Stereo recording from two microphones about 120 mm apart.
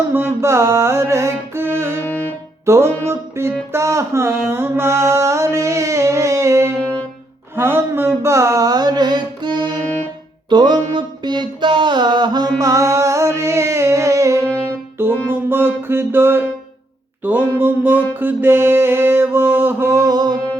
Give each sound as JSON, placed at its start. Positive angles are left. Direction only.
{"t": 0.1, "sound": "music", "side_deg": -20}
{"t": 2.0, "sound": "music", "side_deg": 10}
{"t": 2.6, "sound": "music", "side_deg": -20}
{"t": 3.7, "sound": "mantra", "side_deg": -25}
{"t": 7.5, "sound": "a sound", "side_deg": -20}
{"t": 10.5, "sound": "music", "side_deg": -40}